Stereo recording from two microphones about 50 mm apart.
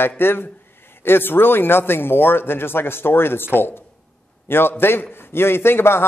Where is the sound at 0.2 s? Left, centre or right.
Left.